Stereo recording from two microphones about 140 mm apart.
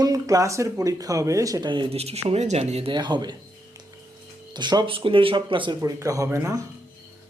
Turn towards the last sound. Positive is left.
turn(degrees=-20)  # may be behind; listen again after turning